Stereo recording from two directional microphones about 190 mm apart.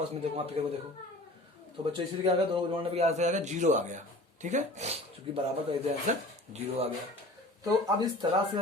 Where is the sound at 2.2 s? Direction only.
25° right (ahead or behind).